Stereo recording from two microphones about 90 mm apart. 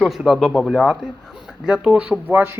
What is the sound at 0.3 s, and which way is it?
A man's voice, centre (ahead or behind).